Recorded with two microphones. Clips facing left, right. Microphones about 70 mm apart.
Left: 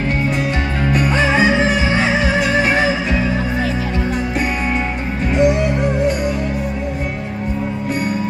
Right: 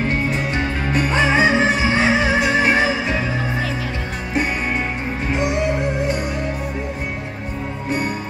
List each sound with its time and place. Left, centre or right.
0.9 s music: right